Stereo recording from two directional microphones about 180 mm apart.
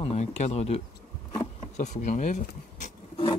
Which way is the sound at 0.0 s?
35° left (ahead or behind).